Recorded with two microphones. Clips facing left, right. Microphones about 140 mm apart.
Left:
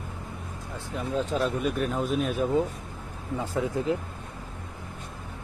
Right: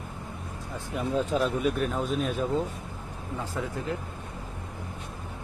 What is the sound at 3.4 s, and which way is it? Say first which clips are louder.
Speech: left 5 dB; 20° left (ahead or behind).